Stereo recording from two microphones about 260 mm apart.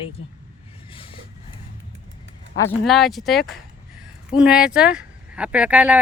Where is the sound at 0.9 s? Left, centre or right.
Centre.